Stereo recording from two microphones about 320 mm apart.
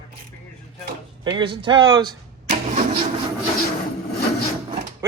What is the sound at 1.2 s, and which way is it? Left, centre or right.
Speech, centre.